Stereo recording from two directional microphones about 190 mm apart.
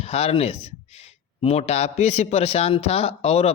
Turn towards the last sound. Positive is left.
turn(degrees=35)  # may be behind; listen again after turning